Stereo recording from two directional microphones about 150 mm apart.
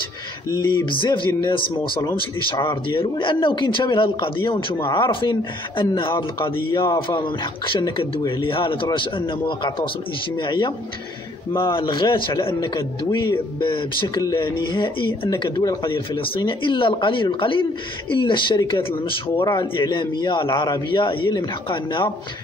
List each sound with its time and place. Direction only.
0.5 s speech: 30° left (ahead or behind)